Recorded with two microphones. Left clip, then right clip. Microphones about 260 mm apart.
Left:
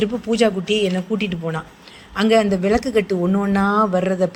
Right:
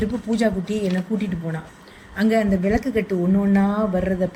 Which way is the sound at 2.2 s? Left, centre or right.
Centre.